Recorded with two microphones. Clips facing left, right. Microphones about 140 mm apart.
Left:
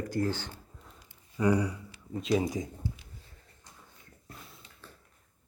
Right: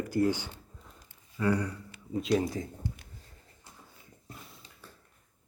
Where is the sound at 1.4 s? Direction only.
15° left (ahead or behind).